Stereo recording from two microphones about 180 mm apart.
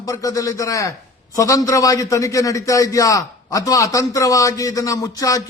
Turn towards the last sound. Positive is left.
turn(degrees=20)  # may be behind; listen again after turning